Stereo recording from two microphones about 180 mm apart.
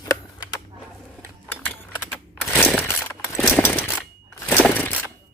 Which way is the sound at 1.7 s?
10° left (ahead or behind).